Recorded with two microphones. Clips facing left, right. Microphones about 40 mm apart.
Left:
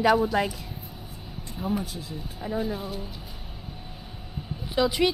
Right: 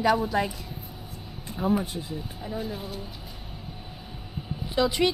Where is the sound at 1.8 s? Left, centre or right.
Right.